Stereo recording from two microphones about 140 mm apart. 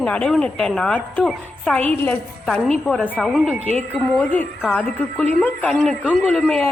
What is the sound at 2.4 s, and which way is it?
A woman's voice, centre (ahead or behind).